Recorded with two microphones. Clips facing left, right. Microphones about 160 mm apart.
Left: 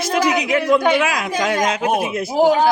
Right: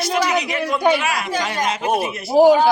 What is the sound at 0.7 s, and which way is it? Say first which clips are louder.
A woman's voice: left 2 dB; 90° left.